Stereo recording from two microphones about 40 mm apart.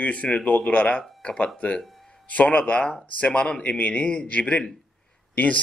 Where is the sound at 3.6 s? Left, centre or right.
Left.